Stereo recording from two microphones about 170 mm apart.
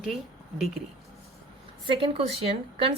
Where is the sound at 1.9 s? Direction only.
30° right (ahead or behind).